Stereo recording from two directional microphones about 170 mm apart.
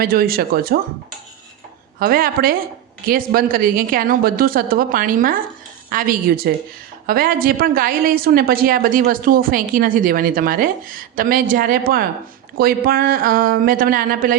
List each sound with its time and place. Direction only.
0.0 s a woman's voice: 60° right (ahead or behind)
2.0 s a woman's voice: 55° right (ahead or behind)